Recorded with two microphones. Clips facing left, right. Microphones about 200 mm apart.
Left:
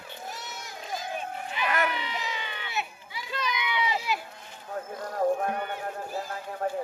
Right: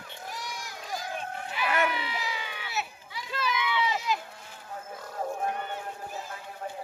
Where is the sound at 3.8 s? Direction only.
5° left (ahead or behind).